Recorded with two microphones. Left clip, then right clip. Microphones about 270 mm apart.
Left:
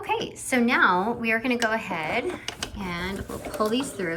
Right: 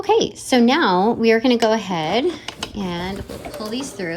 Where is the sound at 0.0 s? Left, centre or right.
Right.